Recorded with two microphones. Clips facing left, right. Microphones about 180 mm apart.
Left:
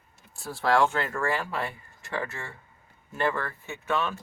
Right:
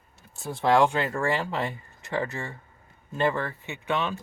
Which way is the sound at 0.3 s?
20° right (ahead or behind).